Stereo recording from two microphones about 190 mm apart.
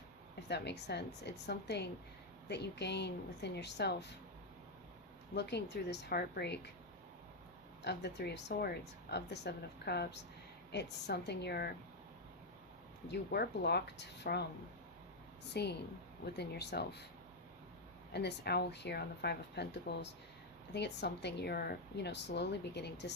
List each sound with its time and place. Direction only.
0.4 s speech: 60° left (ahead or behind)
5.3 s speech: 60° left (ahead or behind)
7.9 s speech: 60° left (ahead or behind)
13.1 s speech: 60° left (ahead or behind)
15.5 s speech: 60° left (ahead or behind)
18.1 s speech: 60° left (ahead or behind)